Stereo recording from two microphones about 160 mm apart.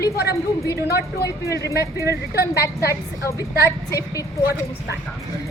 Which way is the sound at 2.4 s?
80° left.